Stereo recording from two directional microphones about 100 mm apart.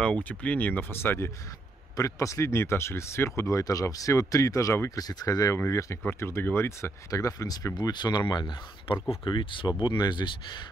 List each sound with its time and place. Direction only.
0.0 s speech: 15° left (ahead or behind)
2.0 s speech: 35° left (ahead or behind)
7.1 s speech: 35° left (ahead or behind)